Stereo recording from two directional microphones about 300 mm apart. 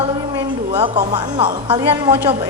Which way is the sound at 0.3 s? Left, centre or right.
Centre.